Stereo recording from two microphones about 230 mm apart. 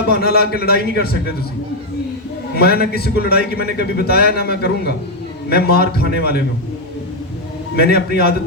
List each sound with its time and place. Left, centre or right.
0.2 s a man's voice: left
2.6 s a man's voice: left
7.8 s a man's voice: left